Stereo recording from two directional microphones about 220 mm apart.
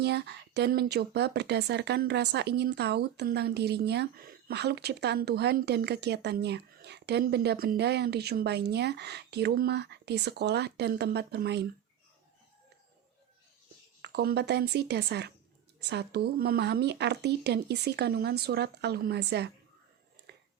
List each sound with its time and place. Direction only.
0.0 s speech: 50° right (ahead or behind)
14.0 s speech: 45° right (ahead or behind)
20.3 s a sound: 50° right (ahead or behind)